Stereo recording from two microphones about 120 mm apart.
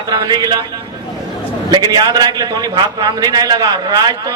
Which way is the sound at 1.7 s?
35° right (ahead or behind).